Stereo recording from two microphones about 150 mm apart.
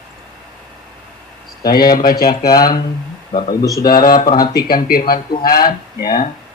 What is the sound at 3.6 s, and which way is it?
Speech, 25° left (ahead or behind).